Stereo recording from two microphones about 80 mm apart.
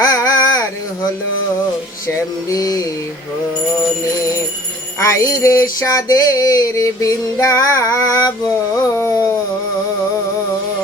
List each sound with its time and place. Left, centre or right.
0.0 s a sound: left
2.5 s music: left
4.9 s music: left